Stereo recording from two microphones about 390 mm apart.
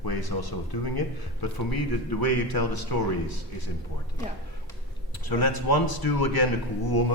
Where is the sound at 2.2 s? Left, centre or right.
Left.